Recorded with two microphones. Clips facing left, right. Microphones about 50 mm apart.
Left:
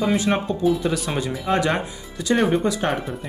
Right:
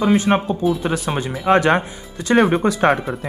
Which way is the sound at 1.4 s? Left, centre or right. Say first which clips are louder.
Right 8 dB; right.